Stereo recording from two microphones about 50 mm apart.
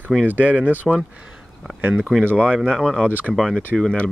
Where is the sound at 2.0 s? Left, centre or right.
Centre.